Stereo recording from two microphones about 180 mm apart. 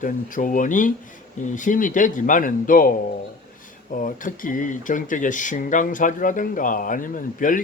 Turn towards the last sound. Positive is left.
turn(degrees=50)  # may be behind; listen again after turning